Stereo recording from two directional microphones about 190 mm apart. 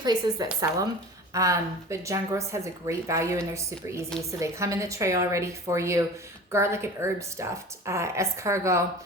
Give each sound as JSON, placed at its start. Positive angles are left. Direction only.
{"t": 0.0, "sound": "a woman's voice", "side_deg": -20}